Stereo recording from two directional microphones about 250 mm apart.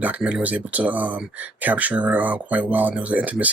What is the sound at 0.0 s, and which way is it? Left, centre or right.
Speech, centre.